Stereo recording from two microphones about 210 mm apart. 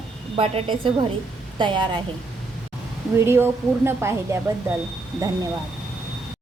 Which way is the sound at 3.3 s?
10° right (ahead or behind).